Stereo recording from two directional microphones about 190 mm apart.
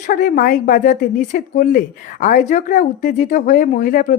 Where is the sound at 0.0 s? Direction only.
45° left (ahead or behind).